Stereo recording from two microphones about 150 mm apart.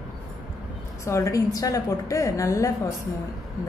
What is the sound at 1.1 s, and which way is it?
A woman's voice, 20° left (ahead or behind).